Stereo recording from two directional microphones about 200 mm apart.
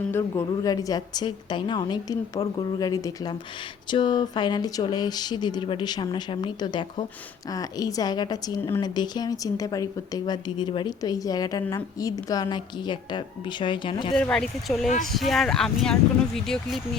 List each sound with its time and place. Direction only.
0.1 s a woman's voice: 15° left (ahead or behind)
14.1 s speech: 5° left (ahead or behind)